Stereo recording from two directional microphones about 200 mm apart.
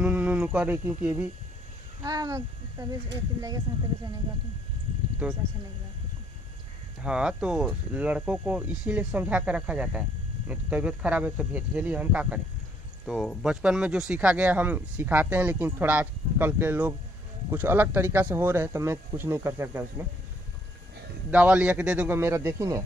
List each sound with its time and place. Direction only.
0.0 s speech: 5° right (ahead or behind)
5.2 s speech: 5° right (ahead or behind)
7.0 s speech: 5° right (ahead or behind)
21.3 s speech: 5° right (ahead or behind)